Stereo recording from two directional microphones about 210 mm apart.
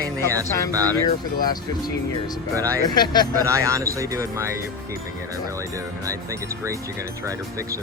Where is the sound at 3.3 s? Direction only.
15° right (ahead or behind).